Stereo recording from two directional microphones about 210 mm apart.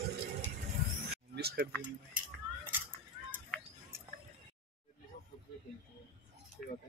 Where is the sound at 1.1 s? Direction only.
50° right (ahead or behind).